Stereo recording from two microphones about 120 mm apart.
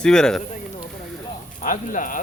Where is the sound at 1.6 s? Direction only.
90° left.